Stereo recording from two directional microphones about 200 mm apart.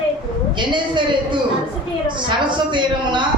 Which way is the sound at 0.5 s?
25° right (ahead or behind).